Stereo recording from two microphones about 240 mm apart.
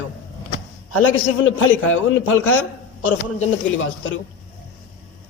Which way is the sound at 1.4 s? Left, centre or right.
Left.